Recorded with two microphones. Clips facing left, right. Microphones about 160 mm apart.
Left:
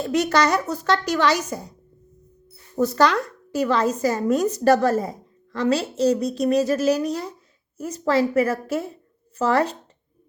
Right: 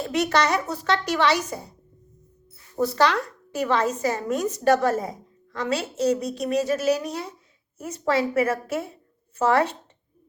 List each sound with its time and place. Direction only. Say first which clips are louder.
0.0 s speech: left 2 dB; 40° left (ahead or behind)
2.8 s speech: left 2 dB; 45° left (ahead or behind)